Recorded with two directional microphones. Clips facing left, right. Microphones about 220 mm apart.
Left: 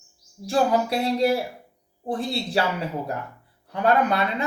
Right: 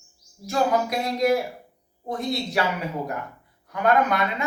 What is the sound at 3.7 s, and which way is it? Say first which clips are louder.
Speech: even; 30° left (ahead or behind).